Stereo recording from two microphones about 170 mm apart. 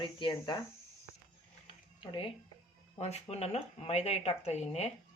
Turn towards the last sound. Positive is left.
turn(degrees=40)  # may be behind; listen again after turning